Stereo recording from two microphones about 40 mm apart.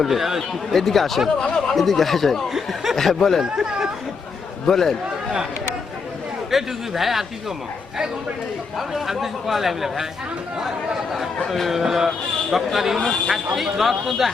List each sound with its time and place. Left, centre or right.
0.0 s speech: centre
0.7 s speech: centre
1.4 s speech: centre
1.7 s speech: centre
2.5 s speech: centre
2.9 s speech: centre
3.5 s speech: centre
4.6 s speech: centre
6.5 s speech: centre
8.9 s speech: centre
11.4 s speech: centre
11.7 s speech: centre